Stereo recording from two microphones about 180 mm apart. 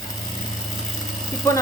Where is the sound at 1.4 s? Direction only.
20° left (ahead or behind).